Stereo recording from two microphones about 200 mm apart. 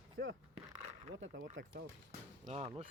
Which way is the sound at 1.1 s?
70° right (ahead or behind).